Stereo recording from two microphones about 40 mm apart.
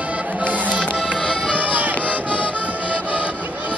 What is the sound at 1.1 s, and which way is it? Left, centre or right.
Accordion, centre.